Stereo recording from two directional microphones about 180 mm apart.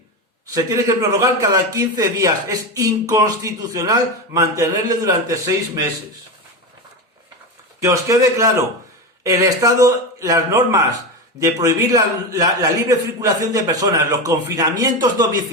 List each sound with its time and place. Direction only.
0.5 s a man's voice: 20° right (ahead or behind)
7.8 s a man's voice: 15° right (ahead or behind)